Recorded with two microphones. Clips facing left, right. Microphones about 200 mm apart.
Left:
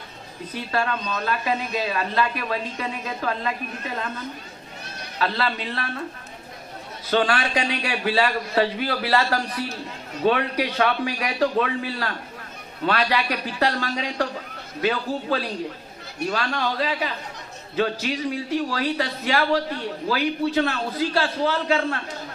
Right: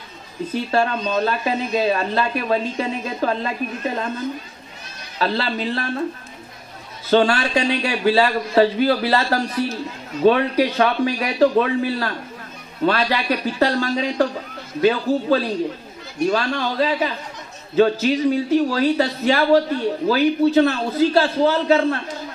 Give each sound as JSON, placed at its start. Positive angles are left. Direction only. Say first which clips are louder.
{"t": 0.5, "sound": "speech", "louder": "right 5 dB", "side_deg": -25}
{"t": 5.2, "sound": "speech", "louder": "right 4 dB", "side_deg": -30}
{"t": 7.1, "sound": "a man's voice", "louder": "right 5 dB", "side_deg": -25}